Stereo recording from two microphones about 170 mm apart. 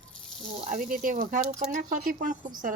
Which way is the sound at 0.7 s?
55° right (ahead or behind).